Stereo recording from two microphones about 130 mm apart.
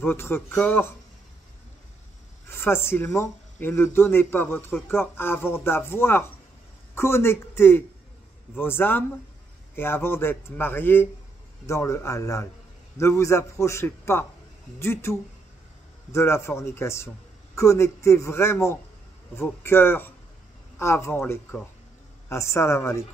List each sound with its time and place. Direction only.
0.0 s speech: 15° left (ahead or behind)
2.5 s a man's voice: 20° left (ahead or behind)